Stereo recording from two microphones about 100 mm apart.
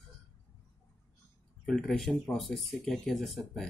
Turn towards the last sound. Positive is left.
turn(degrees=0)  # may be behind; listen again after turning